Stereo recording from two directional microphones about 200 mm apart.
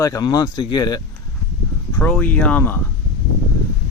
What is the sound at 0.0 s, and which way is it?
Speech, 15° left (ahead or behind).